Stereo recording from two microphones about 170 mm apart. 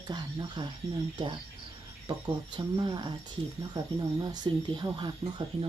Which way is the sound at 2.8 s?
25° right (ahead or behind).